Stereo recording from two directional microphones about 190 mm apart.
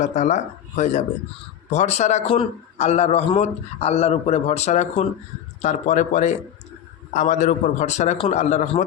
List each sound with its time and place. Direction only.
0.0 s a man's voice: 40° left (ahead or behind)
1.7 s a man's voice: 35° left (ahead or behind)